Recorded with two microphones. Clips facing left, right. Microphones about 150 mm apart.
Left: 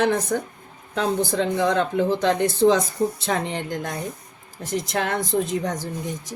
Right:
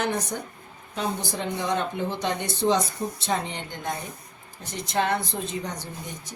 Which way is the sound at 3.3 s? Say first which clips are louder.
Left 4 dB; 90° left.